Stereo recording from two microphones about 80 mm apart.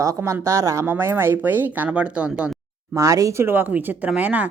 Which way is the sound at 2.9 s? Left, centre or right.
Right.